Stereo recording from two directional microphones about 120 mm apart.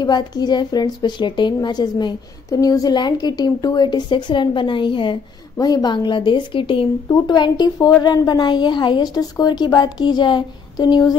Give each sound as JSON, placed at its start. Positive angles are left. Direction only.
{"t": 0.0, "sound": "a woman's voice", "side_deg": 35}
{"t": 5.6, "sound": "a woman's voice", "side_deg": 35}